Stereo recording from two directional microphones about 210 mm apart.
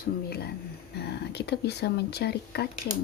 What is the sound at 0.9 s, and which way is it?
Speech, 50° left (ahead or behind).